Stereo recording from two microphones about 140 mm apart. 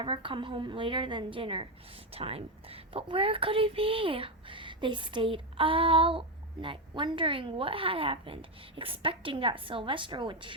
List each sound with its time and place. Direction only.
0.0 s a child's voice: 40° right (ahead or behind)